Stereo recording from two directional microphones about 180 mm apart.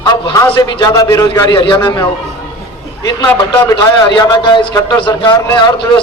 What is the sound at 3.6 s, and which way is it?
A man's voice, 20° left (ahead or behind).